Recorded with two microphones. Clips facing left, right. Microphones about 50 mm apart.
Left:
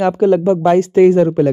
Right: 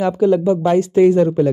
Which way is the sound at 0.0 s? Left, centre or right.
Left.